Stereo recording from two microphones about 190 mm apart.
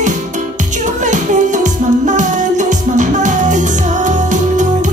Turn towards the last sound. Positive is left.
turn(degrees=-40)  # may be behind; listen again after turning